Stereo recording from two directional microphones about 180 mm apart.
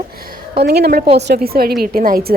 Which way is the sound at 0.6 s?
60° right (ahead or behind).